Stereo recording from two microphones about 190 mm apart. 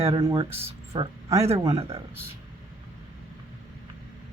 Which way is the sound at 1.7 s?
30° right (ahead or behind).